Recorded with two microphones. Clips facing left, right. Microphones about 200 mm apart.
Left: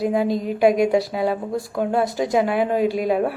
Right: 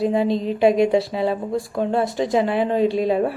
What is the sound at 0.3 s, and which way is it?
Speech, 25° right (ahead or behind).